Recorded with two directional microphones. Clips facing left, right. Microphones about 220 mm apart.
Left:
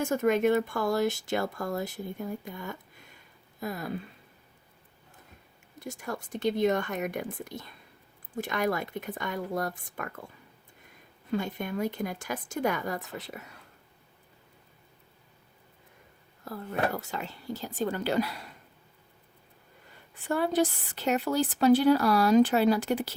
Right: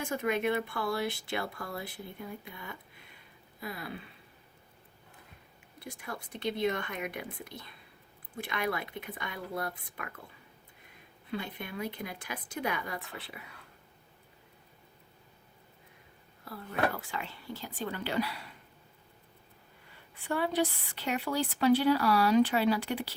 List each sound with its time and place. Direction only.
0.0 s speech: 45° left (ahead or behind)
5.8 s speech: 45° left (ahead or behind)
11.3 s speech: 45° left (ahead or behind)
16.4 s speech: 45° left (ahead or behind)
20.1 s speech: 45° left (ahead or behind)